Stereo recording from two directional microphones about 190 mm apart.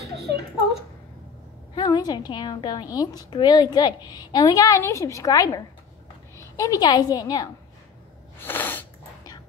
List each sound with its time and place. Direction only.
1.8 s a woman's voice: 20° left (ahead or behind)
8.4 s sneeze: 10° left (ahead or behind)